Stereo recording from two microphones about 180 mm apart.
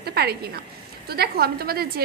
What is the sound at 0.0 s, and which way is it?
A woman's voice, 60° right (ahead or behind).